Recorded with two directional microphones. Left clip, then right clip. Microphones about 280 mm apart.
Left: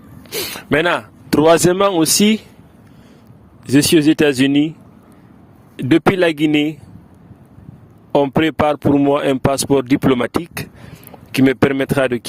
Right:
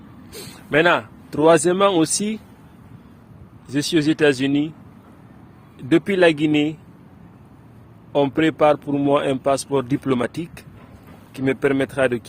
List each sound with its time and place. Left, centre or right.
0.3 s speech: left
3.7 s a man's voice: left
5.7 s a man's voice: left
8.1 s a man's voice: left